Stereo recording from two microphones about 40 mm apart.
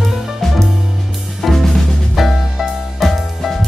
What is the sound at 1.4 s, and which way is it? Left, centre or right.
Drum kit, centre.